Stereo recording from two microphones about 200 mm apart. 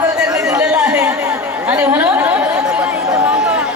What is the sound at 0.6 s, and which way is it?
Chatter, 5° right (ahead or behind).